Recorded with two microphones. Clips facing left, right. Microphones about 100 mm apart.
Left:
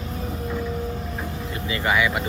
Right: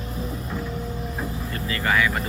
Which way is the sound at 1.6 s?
15° left (ahead or behind).